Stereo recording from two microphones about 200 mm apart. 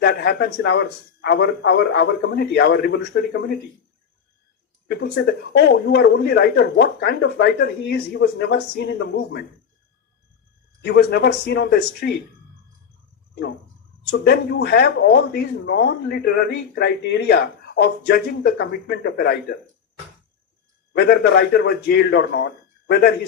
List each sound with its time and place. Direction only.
0.0 s speech: 55° left (ahead or behind)
4.9 s speech: 55° left (ahead or behind)
10.8 s speech: 55° left (ahead or behind)
14.1 s speech: 55° left (ahead or behind)
20.9 s speech: 55° left (ahead or behind)